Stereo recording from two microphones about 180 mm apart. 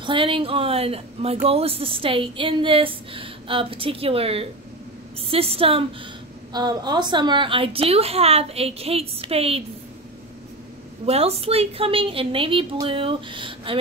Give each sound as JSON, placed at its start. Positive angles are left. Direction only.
{"t": 0.0, "sound": "speech", "side_deg": -30}
{"t": 11.1, "sound": "speech", "side_deg": -35}